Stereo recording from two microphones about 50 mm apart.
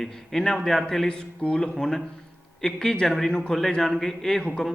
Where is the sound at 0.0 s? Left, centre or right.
Centre.